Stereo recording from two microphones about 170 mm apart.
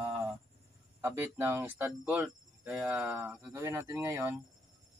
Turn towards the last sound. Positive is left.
turn(degrees=-15)  # may be behind; listen again after turning